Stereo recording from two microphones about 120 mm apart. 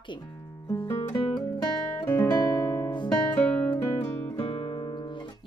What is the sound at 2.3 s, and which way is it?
Guitar, 35° left (ahead or behind).